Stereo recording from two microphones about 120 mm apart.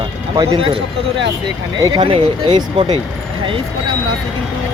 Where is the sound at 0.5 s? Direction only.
50° right (ahead or behind).